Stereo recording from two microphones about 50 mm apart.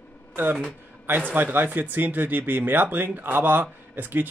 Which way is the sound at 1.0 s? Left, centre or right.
Right.